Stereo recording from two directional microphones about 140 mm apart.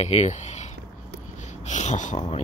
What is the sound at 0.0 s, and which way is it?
Speech, 50° left (ahead or behind).